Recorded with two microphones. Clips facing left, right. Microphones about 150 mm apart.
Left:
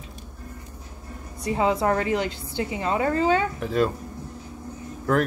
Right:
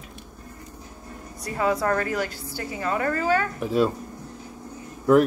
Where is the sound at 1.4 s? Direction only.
20° left (ahead or behind).